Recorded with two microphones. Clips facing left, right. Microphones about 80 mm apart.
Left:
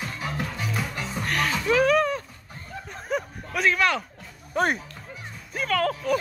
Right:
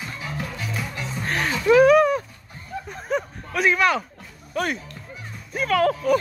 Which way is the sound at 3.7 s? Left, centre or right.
Centre.